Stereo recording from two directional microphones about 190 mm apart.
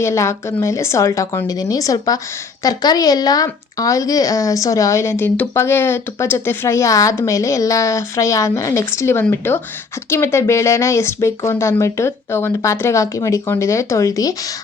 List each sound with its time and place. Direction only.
0.0 s speech: 15° left (ahead or behind)